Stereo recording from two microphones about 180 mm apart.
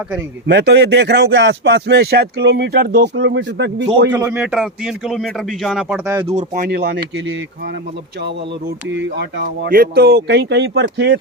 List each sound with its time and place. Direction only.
0.4 s speech: 70° right (ahead or behind)
4.1 s speech: 10° right (ahead or behind)
6.2 s speech: 45° right (ahead or behind)
6.7 s speech: 70° right (ahead or behind)
8.9 s speech: 80° right
9.6 s speech: 55° right (ahead or behind); by 11.2 s 80° right